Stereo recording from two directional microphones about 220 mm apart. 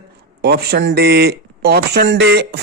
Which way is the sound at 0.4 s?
45° right (ahead or behind).